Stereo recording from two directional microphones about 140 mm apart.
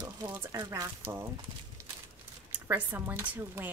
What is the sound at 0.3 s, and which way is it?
Speech, 20° right (ahead or behind).